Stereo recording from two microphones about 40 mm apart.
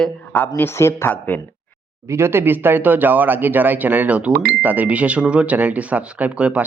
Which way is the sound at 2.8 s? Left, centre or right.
Right.